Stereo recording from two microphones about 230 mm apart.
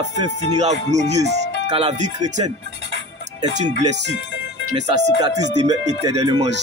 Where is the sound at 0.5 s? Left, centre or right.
Right.